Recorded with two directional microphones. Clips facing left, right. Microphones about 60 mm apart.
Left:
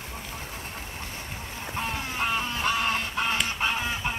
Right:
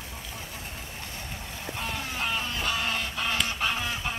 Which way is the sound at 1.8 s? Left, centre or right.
Left.